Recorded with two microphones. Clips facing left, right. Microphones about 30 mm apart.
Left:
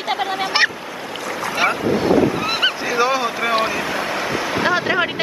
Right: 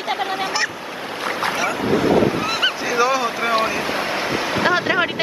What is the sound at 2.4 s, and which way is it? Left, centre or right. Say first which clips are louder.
Speech: left 1 dB; centre.